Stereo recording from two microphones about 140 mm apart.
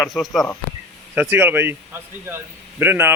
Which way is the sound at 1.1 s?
15° right (ahead or behind).